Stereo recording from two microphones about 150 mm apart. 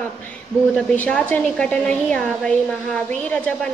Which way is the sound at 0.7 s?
10° left (ahead or behind).